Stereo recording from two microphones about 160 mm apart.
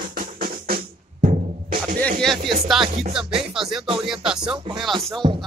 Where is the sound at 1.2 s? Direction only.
60° right (ahead or behind).